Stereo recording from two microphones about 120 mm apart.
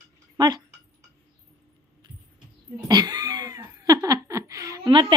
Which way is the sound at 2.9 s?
35° right (ahead or behind).